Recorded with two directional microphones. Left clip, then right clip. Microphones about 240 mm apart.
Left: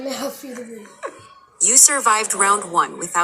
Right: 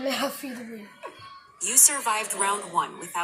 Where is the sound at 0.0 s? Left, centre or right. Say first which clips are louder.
Even; centre.